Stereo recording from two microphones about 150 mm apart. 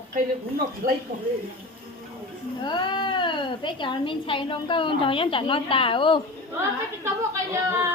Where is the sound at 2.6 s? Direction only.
30° left (ahead or behind).